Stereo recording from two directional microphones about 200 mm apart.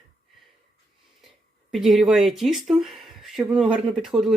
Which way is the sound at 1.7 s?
Centre (ahead or behind).